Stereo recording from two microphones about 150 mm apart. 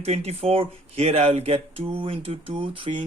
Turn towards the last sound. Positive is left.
turn(degrees=-35)  # may be behind; listen again after turning